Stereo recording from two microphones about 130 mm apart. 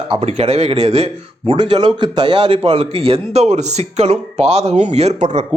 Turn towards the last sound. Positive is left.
turn(degrees=-60)  # may be behind; listen again after turning